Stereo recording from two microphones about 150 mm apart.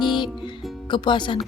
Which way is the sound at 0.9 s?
30° left (ahead or behind).